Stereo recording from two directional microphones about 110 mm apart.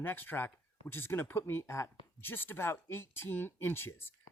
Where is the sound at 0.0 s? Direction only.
20° left (ahead or behind).